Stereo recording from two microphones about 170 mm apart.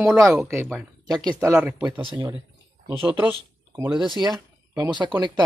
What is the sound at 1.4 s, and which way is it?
Speech, 10° right (ahead or behind).